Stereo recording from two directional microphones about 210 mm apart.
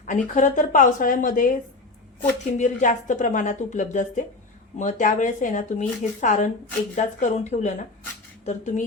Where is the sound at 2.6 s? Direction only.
35° left (ahead or behind).